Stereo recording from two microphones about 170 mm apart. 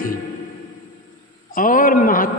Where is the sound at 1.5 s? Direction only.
55° left (ahead or behind).